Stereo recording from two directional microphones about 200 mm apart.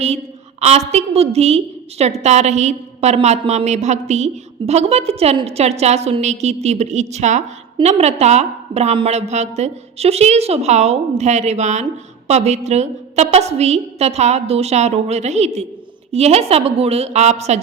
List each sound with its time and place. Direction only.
0.6 s a woman's voice: 35° right (ahead or behind)